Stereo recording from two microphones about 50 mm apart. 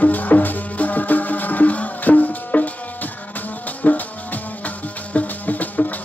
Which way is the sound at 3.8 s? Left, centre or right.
Left.